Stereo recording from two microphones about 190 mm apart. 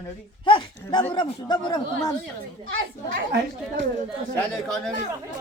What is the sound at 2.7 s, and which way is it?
Speech, 80° right.